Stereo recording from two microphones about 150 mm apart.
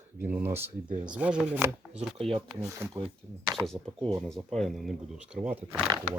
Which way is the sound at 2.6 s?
20° right (ahead or behind).